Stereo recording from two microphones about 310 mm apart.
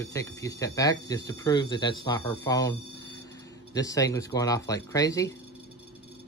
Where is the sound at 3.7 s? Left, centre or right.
Centre.